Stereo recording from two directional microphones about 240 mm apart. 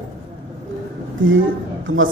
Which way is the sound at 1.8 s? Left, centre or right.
Right.